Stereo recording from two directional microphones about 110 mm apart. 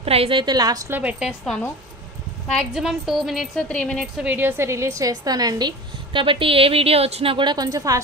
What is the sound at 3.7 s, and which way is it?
Speech, 10° left (ahead or behind).